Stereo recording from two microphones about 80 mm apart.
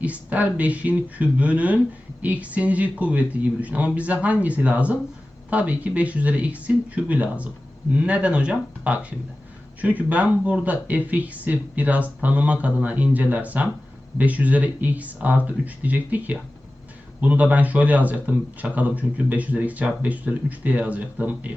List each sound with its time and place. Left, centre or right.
0.0 s speech: centre